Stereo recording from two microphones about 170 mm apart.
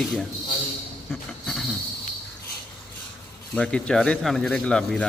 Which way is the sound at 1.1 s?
5° left (ahead or behind).